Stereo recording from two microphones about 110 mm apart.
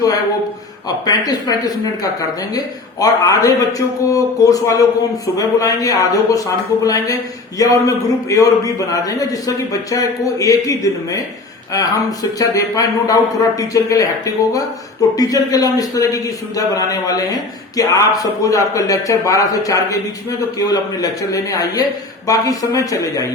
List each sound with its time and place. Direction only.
0.9 s speech: 35° left (ahead or behind)
3.0 s a man's voice: 30° left (ahead or behind)